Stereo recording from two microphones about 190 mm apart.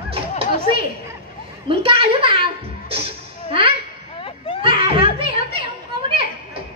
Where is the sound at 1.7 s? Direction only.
30° right (ahead or behind).